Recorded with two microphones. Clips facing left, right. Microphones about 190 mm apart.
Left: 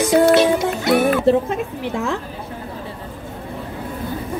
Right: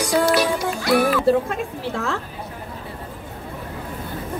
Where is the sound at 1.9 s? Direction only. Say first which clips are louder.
Left 4 dB; 15° left (ahead or behind).